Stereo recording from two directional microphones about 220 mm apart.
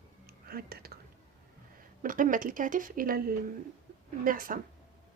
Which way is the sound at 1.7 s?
40° right (ahead or behind).